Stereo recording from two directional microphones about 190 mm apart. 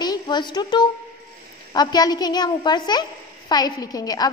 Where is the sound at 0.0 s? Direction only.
20° left (ahead or behind).